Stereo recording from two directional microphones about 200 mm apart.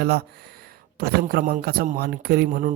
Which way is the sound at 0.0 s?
55° right (ahead or behind).